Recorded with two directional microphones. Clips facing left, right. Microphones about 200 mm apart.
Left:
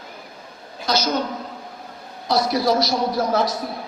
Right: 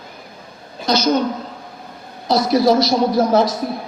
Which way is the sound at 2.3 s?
25° right (ahead or behind).